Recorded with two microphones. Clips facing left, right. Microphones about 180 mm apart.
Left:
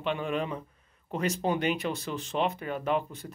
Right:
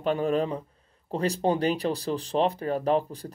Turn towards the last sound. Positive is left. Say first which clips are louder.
# right 4 dB
turn(degrees=-35)  # may be behind; listen again after turning